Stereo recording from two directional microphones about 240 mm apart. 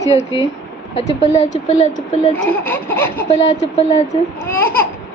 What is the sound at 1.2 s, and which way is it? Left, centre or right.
Speech, left.